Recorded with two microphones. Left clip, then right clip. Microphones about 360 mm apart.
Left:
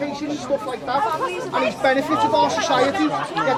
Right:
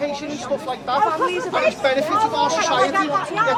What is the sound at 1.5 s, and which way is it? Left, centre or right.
Speech, left.